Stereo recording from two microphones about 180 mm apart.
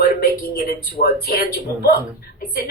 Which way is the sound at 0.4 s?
60° left (ahead or behind).